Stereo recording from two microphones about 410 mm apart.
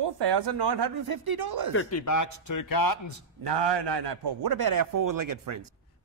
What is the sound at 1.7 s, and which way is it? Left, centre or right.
Speech, left.